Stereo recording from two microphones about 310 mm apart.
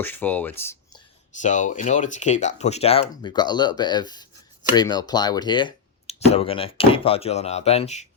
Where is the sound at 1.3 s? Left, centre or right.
Left.